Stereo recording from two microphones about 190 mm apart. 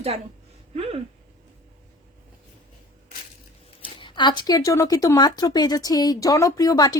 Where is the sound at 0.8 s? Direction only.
30° right (ahead or behind).